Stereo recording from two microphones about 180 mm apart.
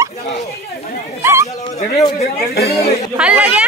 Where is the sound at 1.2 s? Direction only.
15° right (ahead or behind).